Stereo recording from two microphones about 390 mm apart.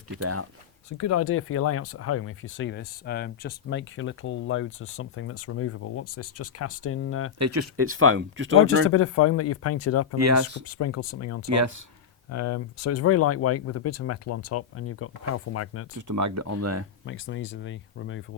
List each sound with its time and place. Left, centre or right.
0.2 s speech: right
0.9 s speech: left
7.3 s speech: right
8.9 s speech: left
10.2 s speech: right
10.7 s speech: left
16.0 s speech: right
17.1 s speech: left